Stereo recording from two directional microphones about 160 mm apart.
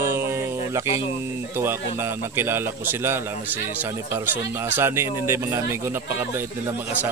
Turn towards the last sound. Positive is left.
turn(degrees=-15)  # may be behind; listen again after turning